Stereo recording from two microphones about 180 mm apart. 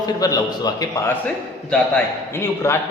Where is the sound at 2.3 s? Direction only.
15° left (ahead or behind).